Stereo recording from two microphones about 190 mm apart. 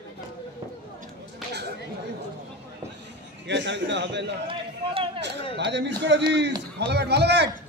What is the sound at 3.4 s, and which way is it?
Speech, 70° right (ahead or behind).